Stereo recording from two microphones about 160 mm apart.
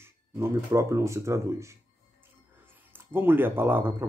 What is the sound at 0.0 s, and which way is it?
Speech, 15° right (ahead or behind).